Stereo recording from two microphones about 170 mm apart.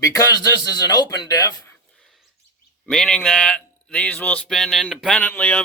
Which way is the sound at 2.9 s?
5° left (ahead or behind).